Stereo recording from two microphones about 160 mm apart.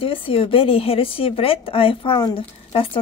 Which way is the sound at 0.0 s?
35° left (ahead or behind).